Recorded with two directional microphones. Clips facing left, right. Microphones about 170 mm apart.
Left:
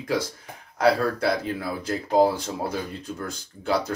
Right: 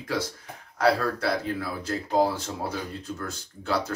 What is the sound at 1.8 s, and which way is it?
Speech, 15° left (ahead or behind).